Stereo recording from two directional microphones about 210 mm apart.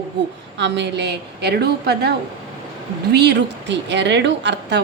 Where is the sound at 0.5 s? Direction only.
55° right (ahead or behind).